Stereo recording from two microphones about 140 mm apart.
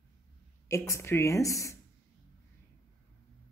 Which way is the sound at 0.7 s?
20° left (ahead or behind).